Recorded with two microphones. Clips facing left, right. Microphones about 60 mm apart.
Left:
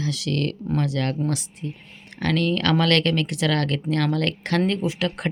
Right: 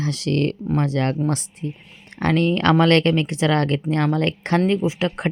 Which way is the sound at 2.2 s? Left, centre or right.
Right.